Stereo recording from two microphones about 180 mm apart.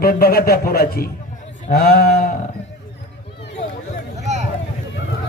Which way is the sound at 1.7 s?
55° left (ahead or behind).